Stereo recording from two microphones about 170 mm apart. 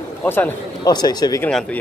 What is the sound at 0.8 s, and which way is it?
Speech, 25° left (ahead or behind).